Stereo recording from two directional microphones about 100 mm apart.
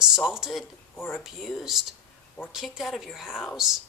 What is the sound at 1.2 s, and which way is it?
Speech, 5° right (ahead or behind).